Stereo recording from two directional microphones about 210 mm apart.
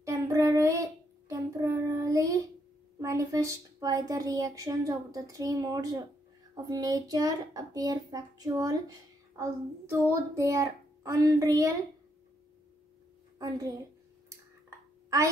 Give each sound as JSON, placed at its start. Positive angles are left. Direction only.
{"t": 0.0, "sound": "child singing", "side_deg": -15}
{"t": 3.0, "sound": "a woman's voice", "side_deg": -15}
{"t": 13.4, "sound": "a woman's voice", "side_deg": -15}